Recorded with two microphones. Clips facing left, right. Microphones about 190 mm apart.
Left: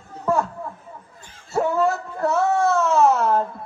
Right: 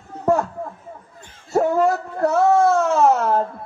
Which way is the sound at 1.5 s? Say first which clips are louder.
Right 3 dB; 45° right (ahead or behind).